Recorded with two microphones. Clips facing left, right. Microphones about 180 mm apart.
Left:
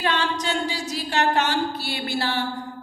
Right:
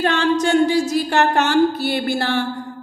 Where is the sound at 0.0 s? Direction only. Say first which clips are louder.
Right 7 dB; 45° right (ahead or behind).